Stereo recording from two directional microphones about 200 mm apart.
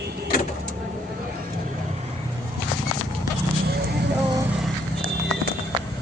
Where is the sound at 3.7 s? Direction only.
50° right (ahead or behind).